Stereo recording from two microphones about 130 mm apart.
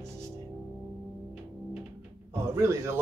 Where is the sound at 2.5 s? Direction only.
20° right (ahead or behind).